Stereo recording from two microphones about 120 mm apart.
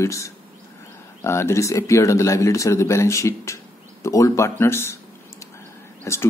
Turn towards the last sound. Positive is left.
turn(degrees=20)  # may be behind; listen again after turning